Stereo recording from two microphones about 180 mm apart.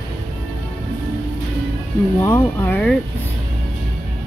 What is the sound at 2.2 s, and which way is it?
Speech, 15° left (ahead or behind).